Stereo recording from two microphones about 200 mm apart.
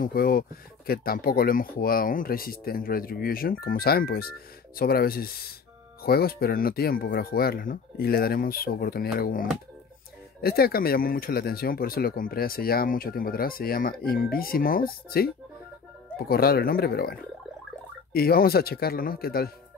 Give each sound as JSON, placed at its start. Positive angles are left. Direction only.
{"t": 0.0, "sound": "speech", "side_deg": 45}